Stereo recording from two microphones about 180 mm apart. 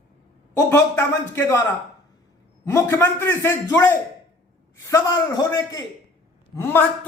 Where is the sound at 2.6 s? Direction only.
15° left (ahead or behind).